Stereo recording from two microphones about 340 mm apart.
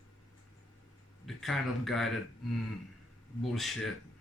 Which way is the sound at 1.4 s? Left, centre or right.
Centre.